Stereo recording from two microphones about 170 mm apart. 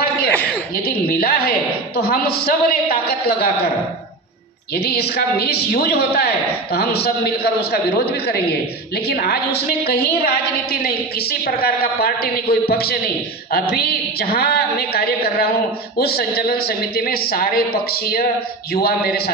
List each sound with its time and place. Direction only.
0.8 s a woman's voice: 65° left (ahead or behind)
4.7 s a man's voice: 70° left (ahead or behind)